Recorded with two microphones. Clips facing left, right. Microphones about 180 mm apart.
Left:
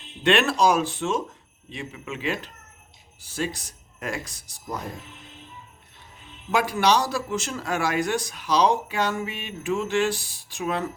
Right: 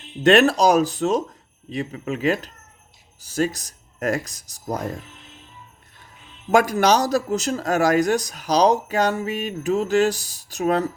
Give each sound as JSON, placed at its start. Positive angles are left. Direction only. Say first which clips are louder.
{"t": 0.2, "sound": "speech", "louder": "right 5 dB", "side_deg": -40}
{"t": 6.5, "sound": "speech", "louder": "right 4 dB", "side_deg": -45}